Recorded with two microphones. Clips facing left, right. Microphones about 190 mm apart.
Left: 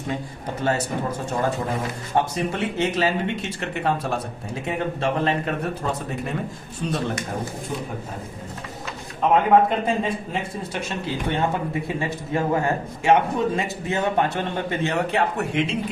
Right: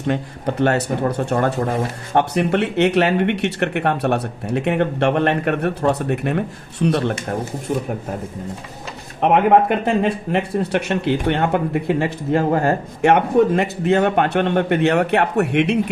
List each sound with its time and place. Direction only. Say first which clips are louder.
0.1 s speech: right 8 dB; 65° right (ahead or behind)
9.2 s speech: right 3 dB; 65° right (ahead or behind)